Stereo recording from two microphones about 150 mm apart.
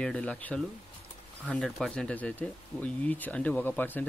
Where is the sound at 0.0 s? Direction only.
10° left (ahead or behind).